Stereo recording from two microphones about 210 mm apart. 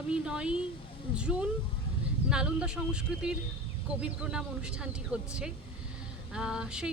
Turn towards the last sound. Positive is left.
turn(degrees=-5)  # may be behind; listen again after turning